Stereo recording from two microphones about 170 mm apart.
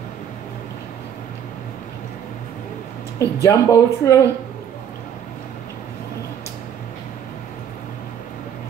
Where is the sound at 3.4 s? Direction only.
20° left (ahead or behind).